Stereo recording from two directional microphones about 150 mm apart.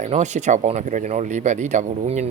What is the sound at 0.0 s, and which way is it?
Speech, 50° right (ahead or behind).